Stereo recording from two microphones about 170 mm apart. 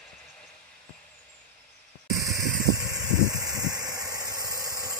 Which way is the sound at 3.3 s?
20° right (ahead or behind).